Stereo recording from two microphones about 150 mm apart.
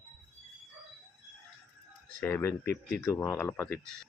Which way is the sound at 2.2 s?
10° left (ahead or behind).